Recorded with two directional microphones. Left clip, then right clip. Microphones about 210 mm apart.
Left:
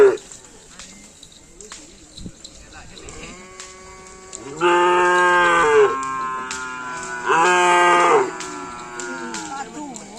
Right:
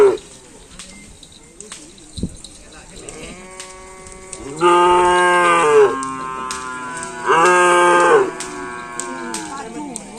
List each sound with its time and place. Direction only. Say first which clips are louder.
4.5 s livestock: right 4 dB; 5° left (ahead or behind)
5.3 s livestock: right 2 dB; 10° right (ahead or behind)
7.3 s a sound: right 3 dB; 15° left (ahead or behind)